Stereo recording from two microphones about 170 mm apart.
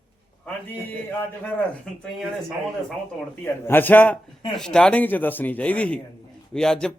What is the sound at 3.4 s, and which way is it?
A man's voice, 10° left (ahead or behind).